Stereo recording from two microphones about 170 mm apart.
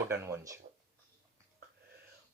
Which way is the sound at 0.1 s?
15° right (ahead or behind).